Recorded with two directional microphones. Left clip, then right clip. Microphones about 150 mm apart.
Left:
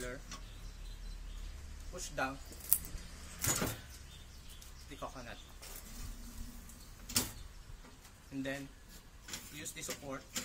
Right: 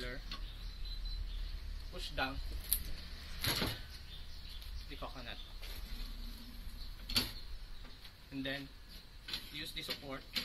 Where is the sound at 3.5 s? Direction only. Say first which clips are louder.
Even; 15° left (ahead or behind).